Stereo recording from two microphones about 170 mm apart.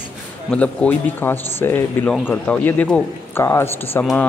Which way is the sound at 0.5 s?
10° left (ahead or behind).